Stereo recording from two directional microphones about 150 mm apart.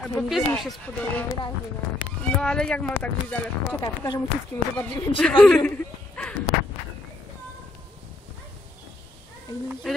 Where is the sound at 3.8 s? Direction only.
25° left (ahead or behind).